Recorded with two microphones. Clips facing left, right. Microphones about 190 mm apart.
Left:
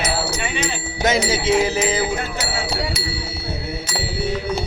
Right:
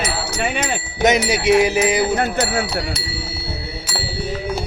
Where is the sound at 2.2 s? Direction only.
55° right (ahead or behind).